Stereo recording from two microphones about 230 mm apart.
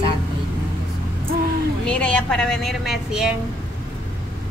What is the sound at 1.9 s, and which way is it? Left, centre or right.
A woman's voice, centre.